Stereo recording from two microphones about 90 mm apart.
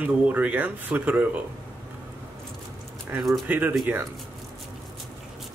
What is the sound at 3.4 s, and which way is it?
Speech, 20° right (ahead or behind).